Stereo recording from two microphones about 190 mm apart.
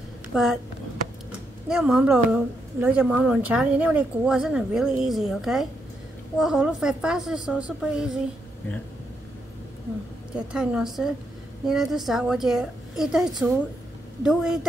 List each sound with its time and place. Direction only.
0.3 s speech: centre (ahead or behind)
1.7 s a woman's voice: 5° right (ahead or behind)
10.3 s a woman's voice: 5° right (ahead or behind)